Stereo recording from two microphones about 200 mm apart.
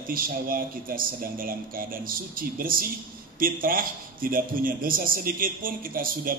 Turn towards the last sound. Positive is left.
turn(degrees=-45)  # may be behind; listen again after turning